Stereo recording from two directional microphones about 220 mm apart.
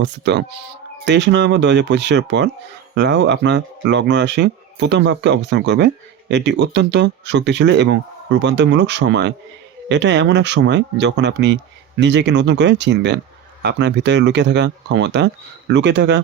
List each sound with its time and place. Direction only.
0.0 s speech: 50° right (ahead or behind)